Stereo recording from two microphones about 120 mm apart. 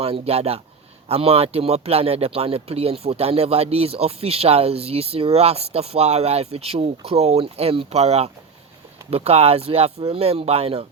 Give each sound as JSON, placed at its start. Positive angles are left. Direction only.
{"t": 0.0, "sound": "speech", "side_deg": -55}